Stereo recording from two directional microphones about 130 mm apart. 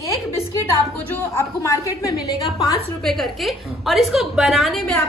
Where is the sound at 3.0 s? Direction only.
Centre (ahead or behind).